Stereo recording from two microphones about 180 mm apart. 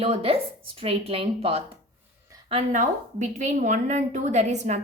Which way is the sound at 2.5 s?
45° right (ahead or behind).